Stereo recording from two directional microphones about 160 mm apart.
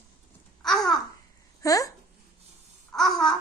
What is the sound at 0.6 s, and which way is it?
Babbling, centre (ahead or behind).